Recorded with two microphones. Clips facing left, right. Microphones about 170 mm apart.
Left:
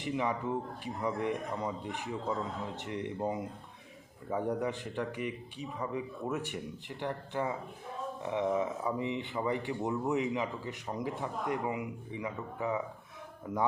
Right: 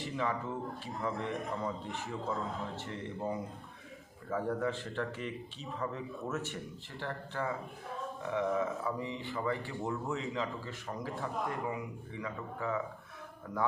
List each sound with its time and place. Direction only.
0.0 s speech: 15° left (ahead or behind)